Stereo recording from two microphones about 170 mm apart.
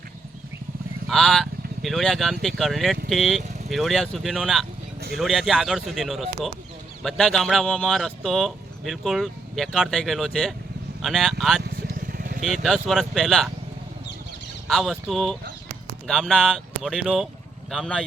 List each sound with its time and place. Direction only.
1.0 s a man's voice: centre (ahead or behind)
11.6 s vehicle: 65° right (ahead or behind)
12.6 s a man's voice: centre (ahead or behind)
14.7 s a man's voice: centre (ahead or behind)